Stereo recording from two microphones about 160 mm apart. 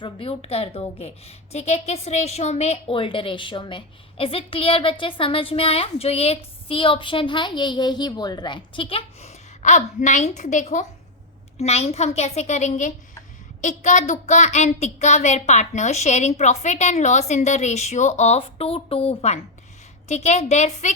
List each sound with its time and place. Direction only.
0.0 s a woman's voice: 35° left (ahead or behind)